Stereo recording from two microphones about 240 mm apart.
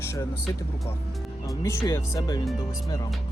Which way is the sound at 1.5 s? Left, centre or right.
Centre.